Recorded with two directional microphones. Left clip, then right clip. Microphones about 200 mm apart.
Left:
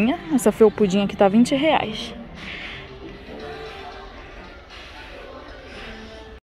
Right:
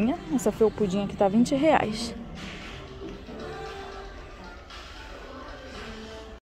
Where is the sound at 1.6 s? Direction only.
15° right (ahead or behind).